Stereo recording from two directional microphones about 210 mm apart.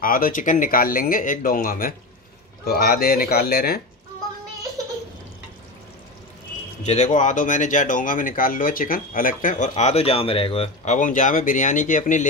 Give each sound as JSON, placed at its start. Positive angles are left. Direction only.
{"t": 0.0, "sound": "speech", "side_deg": 40}
{"t": 6.9, "sound": "speech", "side_deg": 35}